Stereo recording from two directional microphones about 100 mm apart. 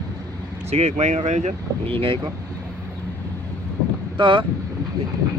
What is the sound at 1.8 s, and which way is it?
Speech, 60° right (ahead or behind).